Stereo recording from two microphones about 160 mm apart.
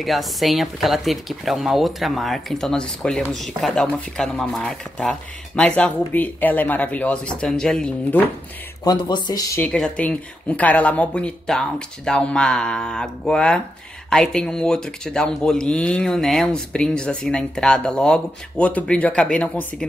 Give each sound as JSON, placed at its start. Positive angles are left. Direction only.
{"t": 0.0, "sound": "speech", "side_deg": 0}
{"t": 8.8, "sound": "speech", "side_deg": 25}
{"t": 9.6, "sound": "speech", "side_deg": 5}